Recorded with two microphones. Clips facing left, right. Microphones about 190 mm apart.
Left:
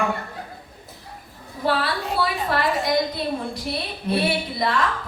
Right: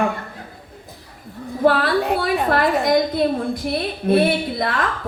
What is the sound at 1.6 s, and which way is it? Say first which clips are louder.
A woman's voice: right 7 dB; 55° right (ahead or behind).